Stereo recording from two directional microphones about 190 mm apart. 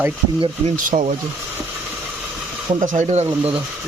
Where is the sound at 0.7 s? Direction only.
40° right (ahead or behind).